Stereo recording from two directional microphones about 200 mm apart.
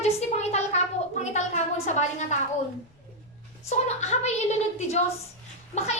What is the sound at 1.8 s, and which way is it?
Speech, 35° left (ahead or behind).